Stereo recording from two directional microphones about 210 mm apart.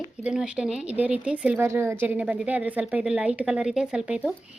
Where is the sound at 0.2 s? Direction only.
5° right (ahead or behind).